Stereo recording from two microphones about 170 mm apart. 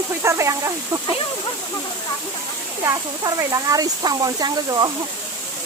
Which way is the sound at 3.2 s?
20° right (ahead or behind).